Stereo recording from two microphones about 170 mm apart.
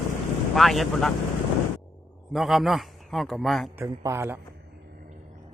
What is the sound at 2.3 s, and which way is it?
A man's voice, centre (ahead or behind).